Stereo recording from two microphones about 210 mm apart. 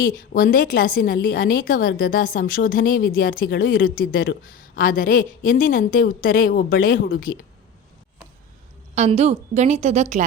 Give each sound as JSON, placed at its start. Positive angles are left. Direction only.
{"t": 0.0, "sound": "a woman's voice", "side_deg": 45}
{"t": 9.0, "sound": "a woman's voice", "side_deg": -30}